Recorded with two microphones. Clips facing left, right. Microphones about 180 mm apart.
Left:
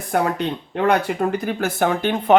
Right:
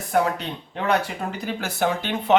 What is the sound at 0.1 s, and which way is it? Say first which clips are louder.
Speech: left 2 dB; 55° left (ahead or behind).